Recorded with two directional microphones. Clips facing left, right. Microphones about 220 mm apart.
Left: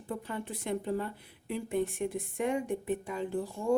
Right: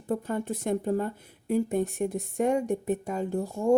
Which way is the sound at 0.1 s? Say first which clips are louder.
Right 8 dB; 45° right (ahead or behind).